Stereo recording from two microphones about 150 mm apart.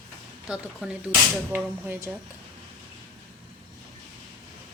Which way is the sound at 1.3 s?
15° right (ahead or behind).